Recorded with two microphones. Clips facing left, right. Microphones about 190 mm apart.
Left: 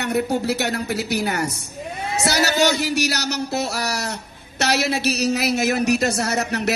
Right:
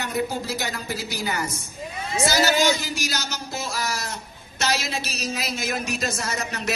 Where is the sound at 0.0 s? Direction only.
65° left (ahead or behind).